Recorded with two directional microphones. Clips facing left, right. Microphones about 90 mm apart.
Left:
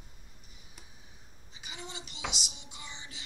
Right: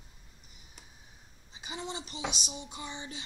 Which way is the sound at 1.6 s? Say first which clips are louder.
Right 6 dB; 30° right (ahead or behind).